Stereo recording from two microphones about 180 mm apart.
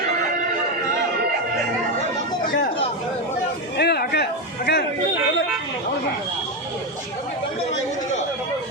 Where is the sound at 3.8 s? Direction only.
65° left (ahead or behind).